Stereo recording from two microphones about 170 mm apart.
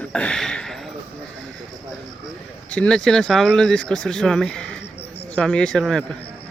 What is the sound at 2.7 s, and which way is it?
Speech, 5° left (ahead or behind).